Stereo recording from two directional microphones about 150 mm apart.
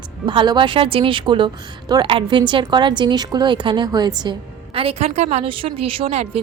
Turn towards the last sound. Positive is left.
turn(degrees=-40)  # may be behind; listen again after turning